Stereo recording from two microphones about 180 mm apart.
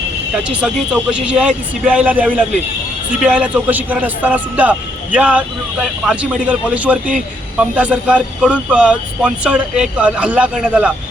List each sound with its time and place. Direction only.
0.4 s speech: 5° right (ahead or behind)